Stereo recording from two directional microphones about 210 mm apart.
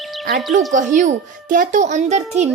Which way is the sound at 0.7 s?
35° right (ahead or behind).